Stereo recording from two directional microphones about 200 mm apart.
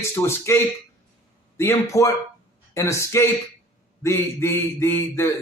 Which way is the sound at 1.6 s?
15° left (ahead or behind).